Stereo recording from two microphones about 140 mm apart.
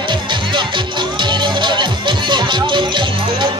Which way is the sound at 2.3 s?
35° right (ahead or behind).